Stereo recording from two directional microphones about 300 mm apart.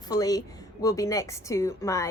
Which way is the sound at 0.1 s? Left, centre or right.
Centre.